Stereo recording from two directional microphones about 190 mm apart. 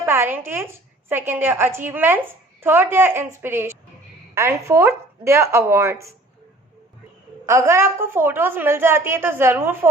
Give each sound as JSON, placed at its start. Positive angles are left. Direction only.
{"t": 0.0, "sound": "a woman's voice", "side_deg": -10}
{"t": 7.4, "sound": "a woman's voice", "side_deg": -15}